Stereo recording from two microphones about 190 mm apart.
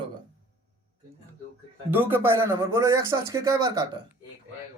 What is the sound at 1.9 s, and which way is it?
A man's voice, 10° right (ahead or behind).